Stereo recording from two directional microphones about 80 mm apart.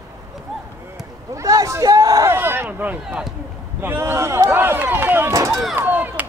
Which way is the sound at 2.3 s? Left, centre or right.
Right.